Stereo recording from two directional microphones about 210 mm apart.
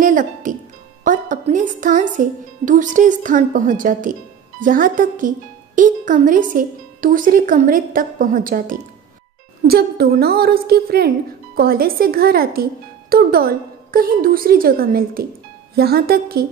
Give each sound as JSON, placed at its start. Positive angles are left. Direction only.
{"t": 0.0, "sound": "music", "side_deg": -40}
{"t": 1.0, "sound": "a woman's voice", "side_deg": -35}